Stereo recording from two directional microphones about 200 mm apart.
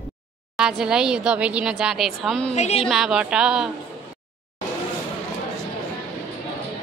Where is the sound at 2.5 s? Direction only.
30° left (ahead or behind).